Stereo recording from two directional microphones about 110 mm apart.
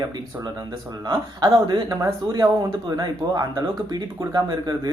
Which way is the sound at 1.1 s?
35° right (ahead or behind).